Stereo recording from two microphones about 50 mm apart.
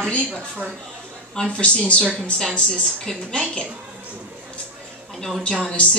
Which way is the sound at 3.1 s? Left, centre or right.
Centre.